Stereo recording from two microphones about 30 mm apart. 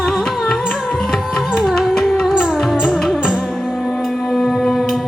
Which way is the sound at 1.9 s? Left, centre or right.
Centre.